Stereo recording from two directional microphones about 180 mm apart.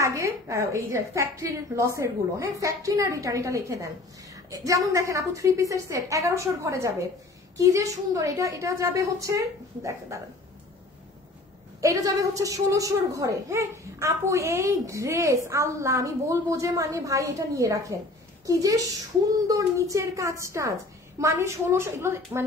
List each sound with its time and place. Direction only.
0.0 s a child's voice: 15° right (ahead or behind)
11.8 s a child's voice: 20° right (ahead or behind)